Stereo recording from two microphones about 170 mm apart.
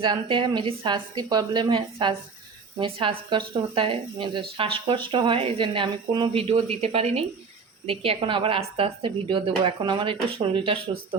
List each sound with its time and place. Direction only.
0.0 s a woman's voice: 30° right (ahead or behind)